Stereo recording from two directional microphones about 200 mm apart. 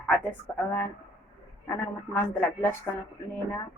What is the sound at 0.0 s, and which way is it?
Speech, 10° left (ahead or behind).